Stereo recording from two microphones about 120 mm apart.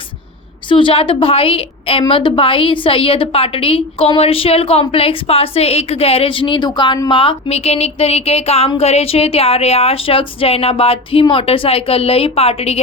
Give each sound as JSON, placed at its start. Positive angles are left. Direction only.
{"t": 0.7, "sound": "a woman's voice", "side_deg": 45}